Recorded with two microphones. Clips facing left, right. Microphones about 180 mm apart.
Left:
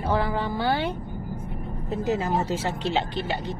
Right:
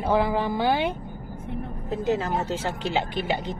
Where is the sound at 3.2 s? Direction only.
15° right (ahead or behind).